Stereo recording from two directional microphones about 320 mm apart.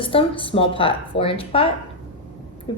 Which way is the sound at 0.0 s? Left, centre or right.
Centre.